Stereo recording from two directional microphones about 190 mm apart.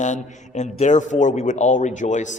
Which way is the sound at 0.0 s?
40° left (ahead or behind).